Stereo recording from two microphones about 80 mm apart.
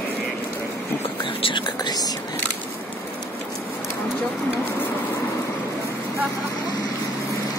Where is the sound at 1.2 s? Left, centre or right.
Left.